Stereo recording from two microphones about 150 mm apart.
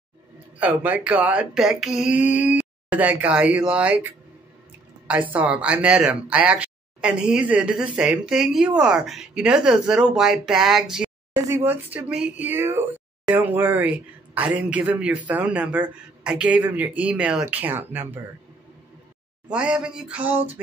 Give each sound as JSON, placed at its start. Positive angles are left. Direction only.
{"t": 0.6, "sound": "speech", "side_deg": -10}
{"t": 11.3, "sound": "speech", "side_deg": -20}
{"t": 19.5, "sound": "speech", "side_deg": -5}